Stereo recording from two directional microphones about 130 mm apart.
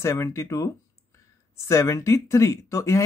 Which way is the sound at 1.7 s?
20° left (ahead or behind).